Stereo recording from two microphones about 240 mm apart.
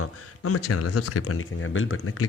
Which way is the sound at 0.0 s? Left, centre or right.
Left.